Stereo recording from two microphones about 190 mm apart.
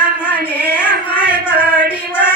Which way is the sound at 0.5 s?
10° left (ahead or behind).